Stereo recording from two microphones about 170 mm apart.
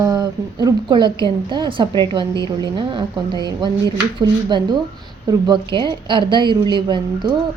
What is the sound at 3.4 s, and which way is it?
A woman's voice, 25° right (ahead or behind).